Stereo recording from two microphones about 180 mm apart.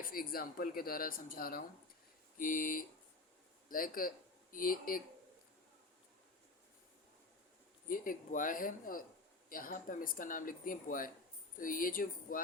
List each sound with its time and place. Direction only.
0.0 s speech: 55° left (ahead or behind)
7.9 s speech: 50° left (ahead or behind)